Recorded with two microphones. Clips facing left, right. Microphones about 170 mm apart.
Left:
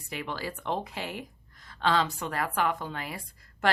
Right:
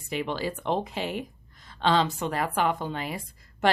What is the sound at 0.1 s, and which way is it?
Speech, 25° right (ahead or behind).